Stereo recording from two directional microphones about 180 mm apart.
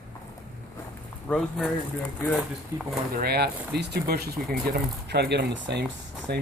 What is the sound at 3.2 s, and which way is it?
Speech, 60° right (ahead or behind).